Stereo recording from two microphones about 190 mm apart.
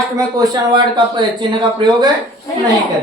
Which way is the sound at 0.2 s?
20° right (ahead or behind).